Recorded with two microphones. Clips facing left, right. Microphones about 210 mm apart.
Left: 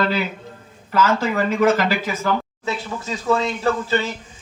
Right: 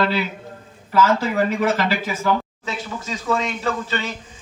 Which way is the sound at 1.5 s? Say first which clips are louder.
Left 3 dB; 45° left (ahead or behind).